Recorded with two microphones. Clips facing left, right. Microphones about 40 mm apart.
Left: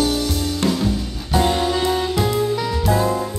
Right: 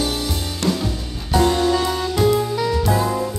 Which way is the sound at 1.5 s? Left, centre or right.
Centre.